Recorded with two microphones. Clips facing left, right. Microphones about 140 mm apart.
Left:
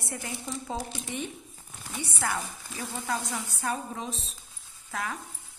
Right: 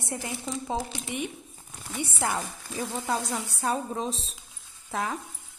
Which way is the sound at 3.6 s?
30° right (ahead or behind).